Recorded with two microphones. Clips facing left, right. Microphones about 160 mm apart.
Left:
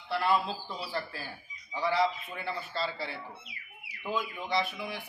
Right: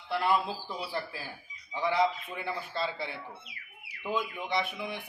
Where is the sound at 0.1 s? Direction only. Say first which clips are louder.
Even; 15° right (ahead or behind).